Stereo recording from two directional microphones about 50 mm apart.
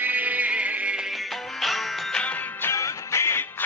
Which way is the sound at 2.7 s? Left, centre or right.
Left.